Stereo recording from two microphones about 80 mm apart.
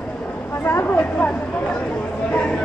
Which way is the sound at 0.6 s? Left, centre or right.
Left.